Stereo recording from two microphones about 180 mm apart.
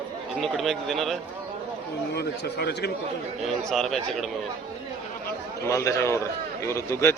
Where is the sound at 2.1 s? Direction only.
65° left (ahead or behind).